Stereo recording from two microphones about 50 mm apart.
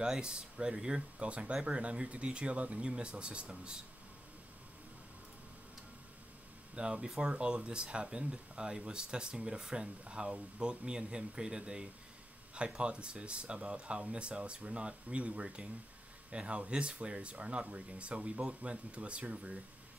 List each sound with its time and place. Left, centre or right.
0.0 s speech: centre
6.7 s speech: right